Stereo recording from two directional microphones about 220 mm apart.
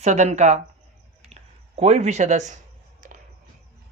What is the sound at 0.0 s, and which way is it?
Speech, 30° right (ahead or behind).